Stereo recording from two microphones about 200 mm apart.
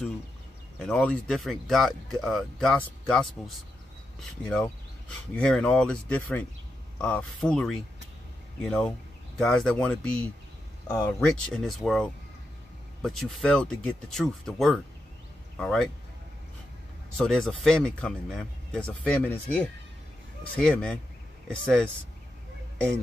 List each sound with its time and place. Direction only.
0.7 s speech: 5° left (ahead or behind)
10.9 s speech: 15° left (ahead or behind)
11.1 s speech: 5° left (ahead or behind)
17.2 s speech: 5° left (ahead or behind)